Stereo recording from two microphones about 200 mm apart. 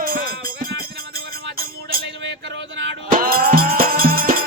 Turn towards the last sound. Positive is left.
turn(degrees=-45)  # may be behind; listen again after turning